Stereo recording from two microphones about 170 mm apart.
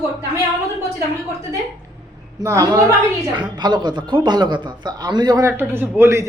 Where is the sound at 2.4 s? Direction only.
20° right (ahead or behind).